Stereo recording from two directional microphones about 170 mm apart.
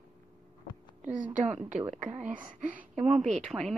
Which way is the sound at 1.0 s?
50° right (ahead or behind).